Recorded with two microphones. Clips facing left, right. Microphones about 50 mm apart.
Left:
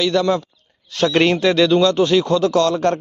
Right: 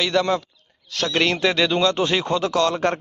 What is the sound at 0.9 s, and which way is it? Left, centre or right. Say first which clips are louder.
Speech: left 6 dB; centre.